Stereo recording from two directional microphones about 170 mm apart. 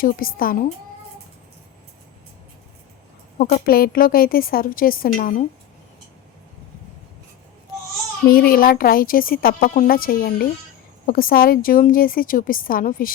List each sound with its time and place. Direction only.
0.0 s a woman's voice: 55° left (ahead or behind)
3.3 s a woman's voice: 60° left (ahead or behind)
8.3 s a woman's voice: 60° left (ahead or behind)